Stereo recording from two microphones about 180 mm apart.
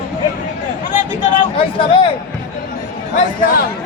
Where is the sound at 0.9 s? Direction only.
45° left (ahead or behind).